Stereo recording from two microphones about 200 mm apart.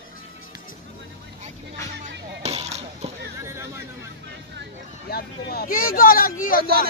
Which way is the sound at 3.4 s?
15° right (ahead or behind).